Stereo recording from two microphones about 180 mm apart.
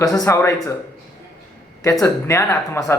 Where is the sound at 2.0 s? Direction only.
15° left (ahead or behind).